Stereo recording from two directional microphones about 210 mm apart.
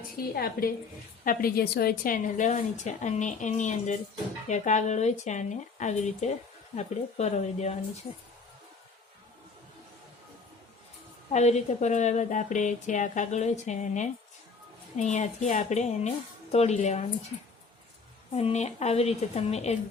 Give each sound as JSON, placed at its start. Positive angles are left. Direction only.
{"t": 0.3, "sound": "a woman's voice", "side_deg": 45}
{"t": 11.3, "sound": "a woman's voice", "side_deg": 30}